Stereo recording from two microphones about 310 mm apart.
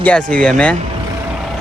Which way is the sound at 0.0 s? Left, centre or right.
Centre.